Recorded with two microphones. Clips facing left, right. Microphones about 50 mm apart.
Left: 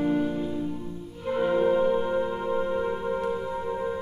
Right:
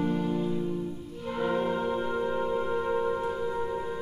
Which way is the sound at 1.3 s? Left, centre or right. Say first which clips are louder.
Left 6 dB; centre.